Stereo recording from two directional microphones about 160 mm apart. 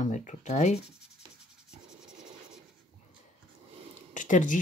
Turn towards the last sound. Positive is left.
turn(degrees=55)  # may be behind; listen again after turning